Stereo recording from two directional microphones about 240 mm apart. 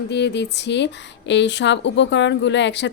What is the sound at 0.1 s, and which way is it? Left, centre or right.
Speech, left.